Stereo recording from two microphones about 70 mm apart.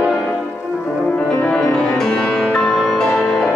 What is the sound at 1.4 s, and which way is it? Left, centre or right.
Music, centre.